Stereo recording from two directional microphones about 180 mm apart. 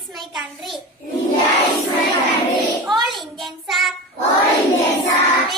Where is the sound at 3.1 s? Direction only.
Centre (ahead or behind).